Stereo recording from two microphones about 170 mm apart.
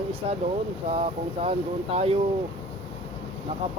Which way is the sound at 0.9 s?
35° right (ahead or behind).